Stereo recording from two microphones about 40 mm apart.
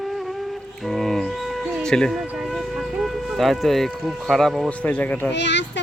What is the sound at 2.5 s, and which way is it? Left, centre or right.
Music, centre.